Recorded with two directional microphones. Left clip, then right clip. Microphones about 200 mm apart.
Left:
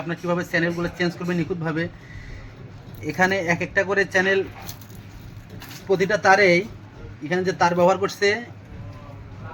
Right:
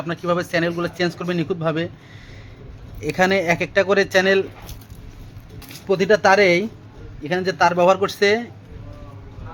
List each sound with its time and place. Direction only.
0.1 s speech: 60° right (ahead or behind)
3.0 s speech: 55° right (ahead or behind)
5.9 s speech: 45° right (ahead or behind)